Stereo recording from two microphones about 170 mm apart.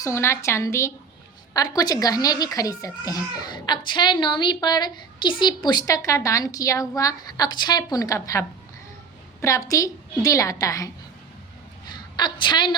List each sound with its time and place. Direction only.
0.0 s a woman's voice: 15° left (ahead or behind)
11.9 s a woman's voice: 25° left (ahead or behind)